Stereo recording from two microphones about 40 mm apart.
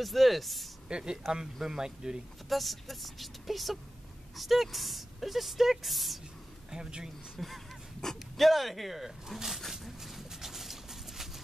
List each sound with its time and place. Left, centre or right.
0.0 s speech: centre
0.8 s speech: right
2.5 s speech: centre
6.7 s speech: centre
7.3 s speech: centre
9.6 s a sound: centre